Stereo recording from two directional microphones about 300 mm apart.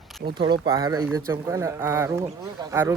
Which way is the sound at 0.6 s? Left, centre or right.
Centre.